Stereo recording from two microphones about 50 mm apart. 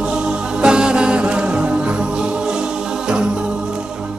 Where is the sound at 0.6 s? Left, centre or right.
Centre.